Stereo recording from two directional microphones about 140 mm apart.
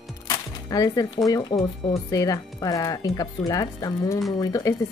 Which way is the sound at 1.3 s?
30° left (ahead or behind).